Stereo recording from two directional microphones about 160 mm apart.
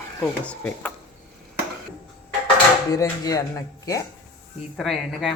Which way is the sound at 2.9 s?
20° left (ahead or behind).